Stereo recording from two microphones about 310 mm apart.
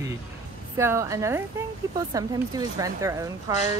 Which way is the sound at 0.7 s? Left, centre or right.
Centre.